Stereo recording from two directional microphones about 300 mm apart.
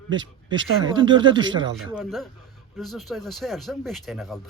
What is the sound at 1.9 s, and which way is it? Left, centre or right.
Speech, centre.